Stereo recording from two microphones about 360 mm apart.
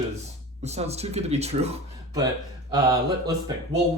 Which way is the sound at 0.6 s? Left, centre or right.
Centre.